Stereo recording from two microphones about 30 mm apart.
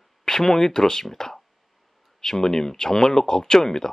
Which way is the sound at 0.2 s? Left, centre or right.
Centre.